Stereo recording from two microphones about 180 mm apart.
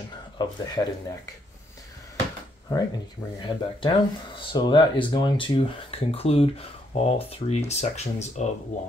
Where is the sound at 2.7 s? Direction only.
20° left (ahead or behind).